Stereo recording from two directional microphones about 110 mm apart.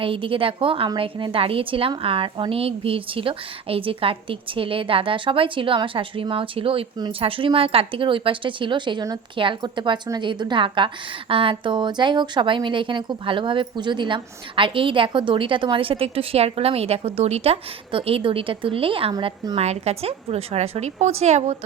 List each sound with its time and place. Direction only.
0.0 s a woman's voice: 55° right (ahead or behind)
19.5 s a woman's voice: 75° right (ahead or behind); by 21.5 s 90° right